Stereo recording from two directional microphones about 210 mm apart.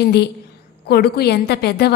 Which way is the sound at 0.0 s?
50° left (ahead or behind).